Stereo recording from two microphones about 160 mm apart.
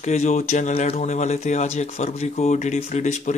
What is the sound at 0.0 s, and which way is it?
Speech, 45° left (ahead or behind).